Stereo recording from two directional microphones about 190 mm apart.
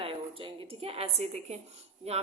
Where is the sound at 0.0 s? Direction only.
30° right (ahead or behind).